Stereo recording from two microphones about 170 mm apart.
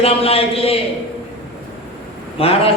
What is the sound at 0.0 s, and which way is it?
Speech, 35° left (ahead or behind).